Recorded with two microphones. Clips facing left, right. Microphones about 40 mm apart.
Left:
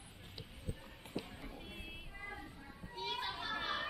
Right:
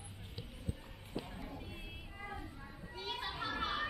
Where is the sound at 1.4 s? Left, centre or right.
Centre.